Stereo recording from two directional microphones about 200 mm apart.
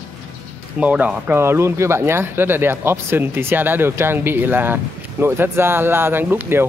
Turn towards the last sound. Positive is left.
turn(degrees=-10)  # may be behind; listen again after turning